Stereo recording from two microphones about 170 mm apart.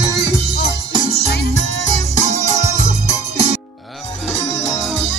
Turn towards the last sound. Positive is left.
turn(degrees=-40)  # may be behind; listen again after turning